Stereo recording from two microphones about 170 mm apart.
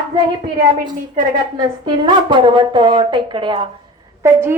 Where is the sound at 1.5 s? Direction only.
25° right (ahead or behind).